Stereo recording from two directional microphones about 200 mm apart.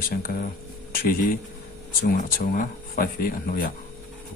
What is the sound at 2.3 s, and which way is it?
Speech, 45° left (ahead or behind).